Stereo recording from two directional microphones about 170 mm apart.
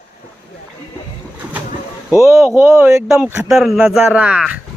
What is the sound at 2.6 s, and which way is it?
Speech, 15° right (ahead or behind).